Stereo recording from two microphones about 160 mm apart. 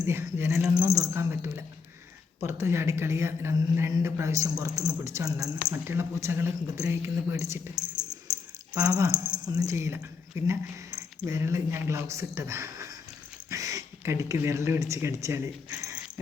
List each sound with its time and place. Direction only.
0.0 s a man's voice: 15° right (ahead or behind)
0.9 s a man's voice: 15° right (ahead or behind)
7.8 s a sound: 5° right (ahead or behind)
8.7 s a man's voice: 20° right (ahead or behind)